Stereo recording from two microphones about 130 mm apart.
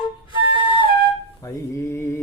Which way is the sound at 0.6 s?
40° left (ahead or behind).